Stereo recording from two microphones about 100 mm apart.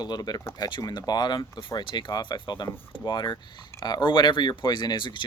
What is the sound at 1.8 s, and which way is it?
Speech, 50° left (ahead or behind).